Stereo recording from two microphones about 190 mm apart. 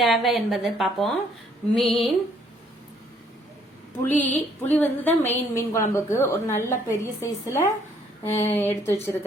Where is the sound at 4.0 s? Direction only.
10° left (ahead or behind).